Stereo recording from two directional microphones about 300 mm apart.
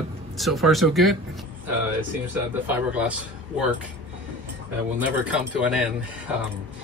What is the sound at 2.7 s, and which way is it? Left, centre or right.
Speech, centre.